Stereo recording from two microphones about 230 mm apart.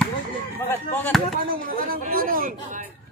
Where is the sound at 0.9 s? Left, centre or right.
Centre.